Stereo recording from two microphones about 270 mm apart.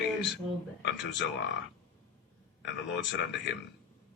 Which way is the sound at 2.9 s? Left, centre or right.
Left.